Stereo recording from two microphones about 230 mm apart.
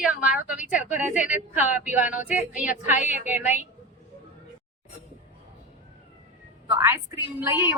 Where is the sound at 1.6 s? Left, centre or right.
Left.